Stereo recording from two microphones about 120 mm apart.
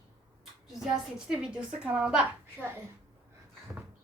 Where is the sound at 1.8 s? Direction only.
10° right (ahead or behind).